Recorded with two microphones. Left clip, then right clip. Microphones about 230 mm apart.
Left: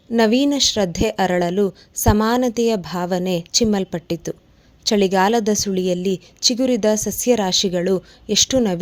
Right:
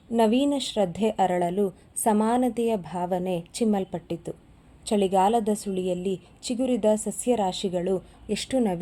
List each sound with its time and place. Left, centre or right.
0.1 s speech: left